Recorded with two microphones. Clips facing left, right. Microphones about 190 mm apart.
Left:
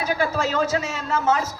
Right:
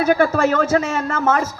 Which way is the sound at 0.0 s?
55° right (ahead or behind).